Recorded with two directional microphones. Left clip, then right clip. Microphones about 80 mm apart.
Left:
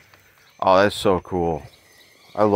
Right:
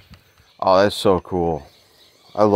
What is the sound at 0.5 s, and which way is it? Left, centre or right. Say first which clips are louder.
Speech: right 1 dB; centre.